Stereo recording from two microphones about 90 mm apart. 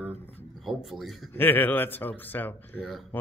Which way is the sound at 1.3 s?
20° left (ahead or behind).